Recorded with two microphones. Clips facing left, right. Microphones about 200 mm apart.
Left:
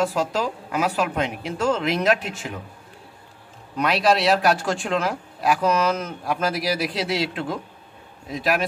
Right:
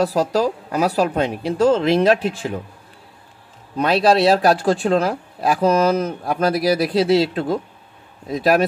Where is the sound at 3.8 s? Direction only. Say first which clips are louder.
Right 5 dB; 30° right (ahead or behind).